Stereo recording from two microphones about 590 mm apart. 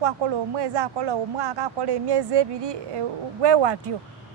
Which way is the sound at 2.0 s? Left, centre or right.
Right.